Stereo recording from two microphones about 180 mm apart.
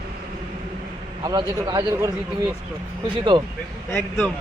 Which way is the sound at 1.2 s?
25° right (ahead or behind).